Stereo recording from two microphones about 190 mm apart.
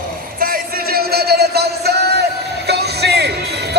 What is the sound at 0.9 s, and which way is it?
Music, 55° right (ahead or behind).